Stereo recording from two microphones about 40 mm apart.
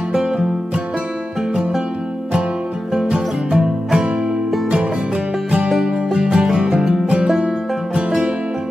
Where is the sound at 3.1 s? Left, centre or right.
Centre.